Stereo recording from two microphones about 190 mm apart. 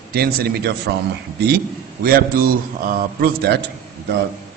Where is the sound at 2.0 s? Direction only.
50° right (ahead or behind).